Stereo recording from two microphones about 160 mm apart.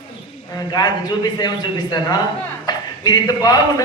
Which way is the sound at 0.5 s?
25° left (ahead or behind).